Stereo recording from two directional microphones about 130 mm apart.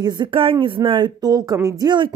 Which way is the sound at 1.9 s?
40° right (ahead or behind).